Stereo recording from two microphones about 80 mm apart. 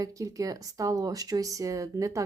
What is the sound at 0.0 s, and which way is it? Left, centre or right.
Speech, right.